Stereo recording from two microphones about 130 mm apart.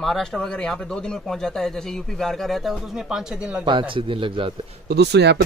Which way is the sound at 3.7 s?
40° right (ahead or behind).